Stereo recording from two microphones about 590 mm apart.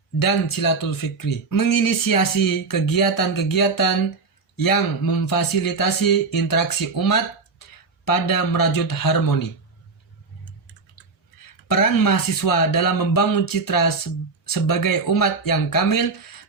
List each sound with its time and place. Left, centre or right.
0.2 s speech: left
11.7 s speech: left